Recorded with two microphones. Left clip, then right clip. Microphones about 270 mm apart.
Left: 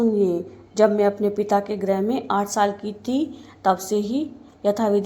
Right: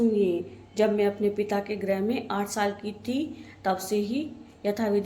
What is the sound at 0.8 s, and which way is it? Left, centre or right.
A woman's voice, centre.